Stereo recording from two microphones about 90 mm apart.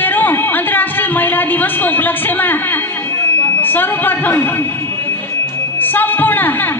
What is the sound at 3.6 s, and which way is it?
A man's voice, 20° left (ahead or behind).